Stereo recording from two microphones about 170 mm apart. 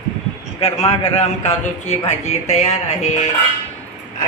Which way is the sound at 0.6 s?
35° left (ahead or behind).